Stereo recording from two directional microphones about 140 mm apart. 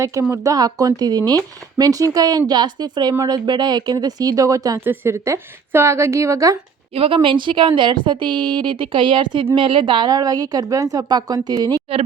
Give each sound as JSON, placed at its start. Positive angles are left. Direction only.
{"t": 0.0, "sound": "a woman's voice", "side_deg": -20}
{"t": 6.9, "sound": "a woman's voice", "side_deg": -40}